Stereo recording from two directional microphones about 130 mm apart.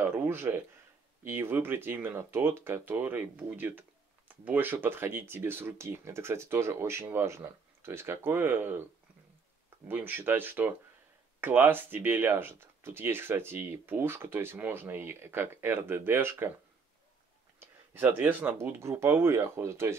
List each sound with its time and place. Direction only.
0.0 s a sound: 15° right (ahead or behind)
1.2 s speech: 15° right (ahead or behind)
9.8 s speech: 15° right (ahead or behind)
17.6 s speech: 15° right (ahead or behind)